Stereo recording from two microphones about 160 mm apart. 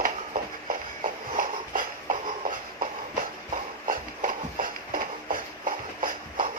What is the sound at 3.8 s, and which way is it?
Clip-clop, 55° right (ahead or behind).